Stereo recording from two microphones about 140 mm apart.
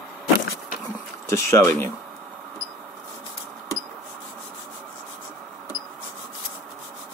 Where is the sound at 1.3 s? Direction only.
20° left (ahead or behind).